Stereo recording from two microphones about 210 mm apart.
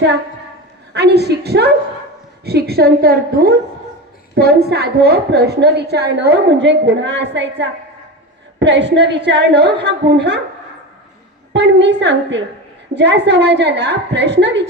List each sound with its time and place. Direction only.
0.9 s a woman's voice: 50° right (ahead or behind)
11.5 s a woman's voice: 55° right (ahead or behind)